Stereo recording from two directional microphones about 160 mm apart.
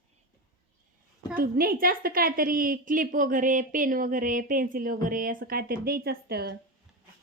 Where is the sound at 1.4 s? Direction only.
65° right (ahead or behind).